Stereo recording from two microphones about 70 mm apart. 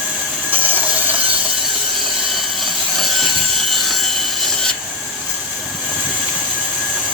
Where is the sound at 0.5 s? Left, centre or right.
Right.